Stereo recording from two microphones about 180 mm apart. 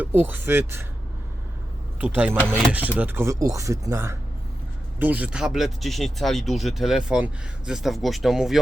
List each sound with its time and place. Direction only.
0.0 s speech: 10° right (ahead or behind)
2.0 s speech: 10° right (ahead or behind)